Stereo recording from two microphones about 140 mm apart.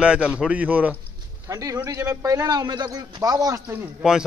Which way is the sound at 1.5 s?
25° right (ahead or behind).